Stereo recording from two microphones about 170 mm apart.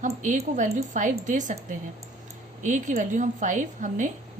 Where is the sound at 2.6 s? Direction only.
45° right (ahead or behind).